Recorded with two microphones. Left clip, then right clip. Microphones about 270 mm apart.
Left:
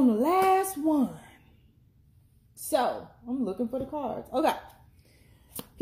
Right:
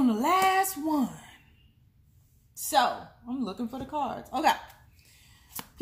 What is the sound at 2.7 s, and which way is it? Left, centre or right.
Speech, centre.